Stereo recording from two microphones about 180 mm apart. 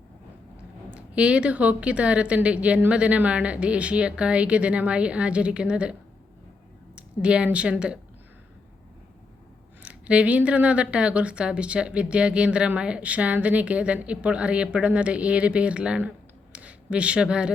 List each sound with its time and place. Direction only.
0.9 s speech: 5° right (ahead or behind)
9.8 s speech: 5° right (ahead or behind)